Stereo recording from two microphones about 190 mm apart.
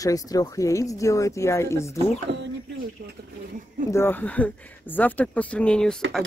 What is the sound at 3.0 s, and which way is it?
Speech, 55° right (ahead or behind).